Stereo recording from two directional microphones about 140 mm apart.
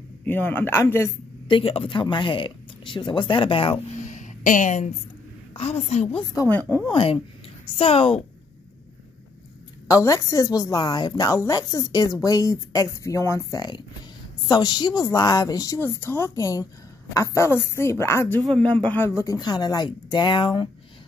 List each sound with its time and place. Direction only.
0.2 s a woman's voice: 15° left (ahead or behind)
1.5 s speech: 40° left (ahead or behind)
4.0 s a sound: 60° left (ahead or behind)
5.5 s a woman's voice: 45° left (ahead or behind)
6.4 s a woman's voice: 25° left (ahead or behind)
6.9 s a woman's voice: 40° left (ahead or behind)
9.8 s a woman's voice: 25° left (ahead or behind)